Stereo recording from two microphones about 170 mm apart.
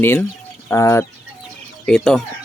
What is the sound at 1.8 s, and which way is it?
Speech, 5° left (ahead or behind).